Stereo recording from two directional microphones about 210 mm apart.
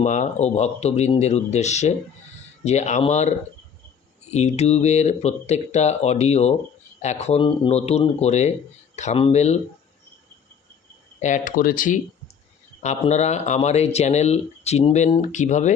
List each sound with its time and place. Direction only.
0.0 s speech: 35° left (ahead or behind)
11.2 s speech: 40° left (ahead or behind)